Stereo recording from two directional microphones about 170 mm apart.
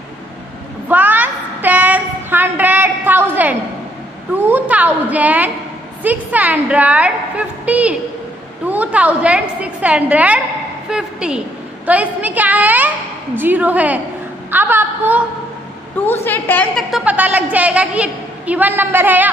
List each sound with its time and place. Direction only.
0.8 s a sound: 10° right (ahead or behind)
6.0 s a woman's voice: 10° right (ahead or behind)
16.1 s a woman's voice: 10° left (ahead or behind)
16.9 s a woman's voice: 10° right (ahead or behind)